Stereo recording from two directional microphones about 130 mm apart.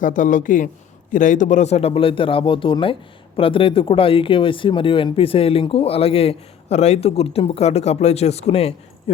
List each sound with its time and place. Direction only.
0.0 s a man's voice: 85° left; by 9.1 s 50° left (ahead or behind)